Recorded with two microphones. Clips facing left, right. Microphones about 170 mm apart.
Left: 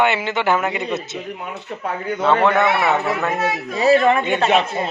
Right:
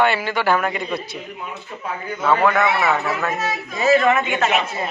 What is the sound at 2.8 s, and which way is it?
Speech, centre (ahead or behind).